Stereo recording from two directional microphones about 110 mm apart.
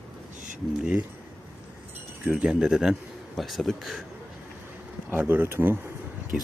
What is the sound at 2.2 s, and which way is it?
Speech, 5° right (ahead or behind).